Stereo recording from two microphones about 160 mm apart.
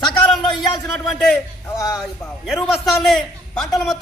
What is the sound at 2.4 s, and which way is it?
A man's voice, centre (ahead or behind).